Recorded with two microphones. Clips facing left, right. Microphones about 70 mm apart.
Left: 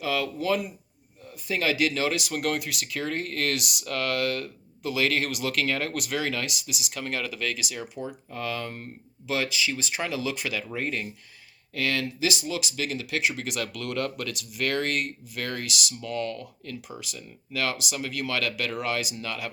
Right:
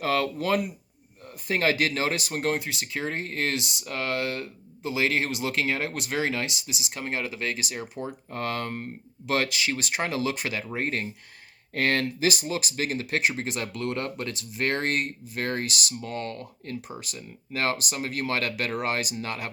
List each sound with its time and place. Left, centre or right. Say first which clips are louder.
0.0 s speech: right 2 dB; right